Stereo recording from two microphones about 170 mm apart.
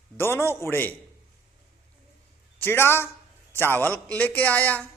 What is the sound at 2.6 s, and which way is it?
A man's voice, 15° left (ahead or behind).